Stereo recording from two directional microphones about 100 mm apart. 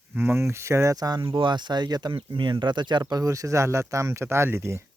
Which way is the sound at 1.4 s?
50° right (ahead or behind).